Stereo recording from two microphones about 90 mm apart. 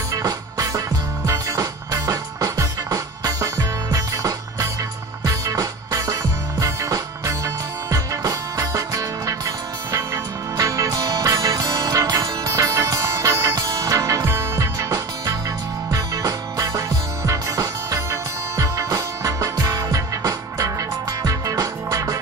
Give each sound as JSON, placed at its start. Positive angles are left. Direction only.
{"t": 0.1, "sound": "music", "side_deg": -40}